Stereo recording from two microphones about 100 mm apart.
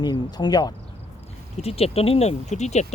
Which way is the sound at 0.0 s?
45° left (ahead or behind).